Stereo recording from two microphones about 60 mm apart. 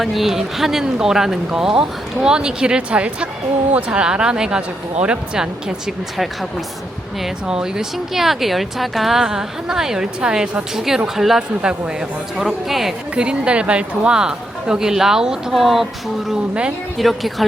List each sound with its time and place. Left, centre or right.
0.0 s speech: centre
7.2 s speech: centre
13.1 s speech: centre
16.3 s speech: centre
17.0 s speech: centre